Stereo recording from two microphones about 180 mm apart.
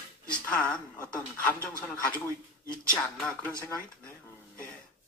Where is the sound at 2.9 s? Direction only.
5° left (ahead or behind).